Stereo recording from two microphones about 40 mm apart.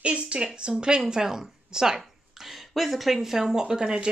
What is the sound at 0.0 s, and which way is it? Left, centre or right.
Speech, right.